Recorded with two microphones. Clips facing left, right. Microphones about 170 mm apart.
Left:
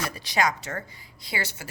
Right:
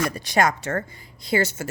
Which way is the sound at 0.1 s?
50° right (ahead or behind).